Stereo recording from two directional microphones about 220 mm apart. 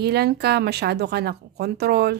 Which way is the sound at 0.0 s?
45° right (ahead or behind).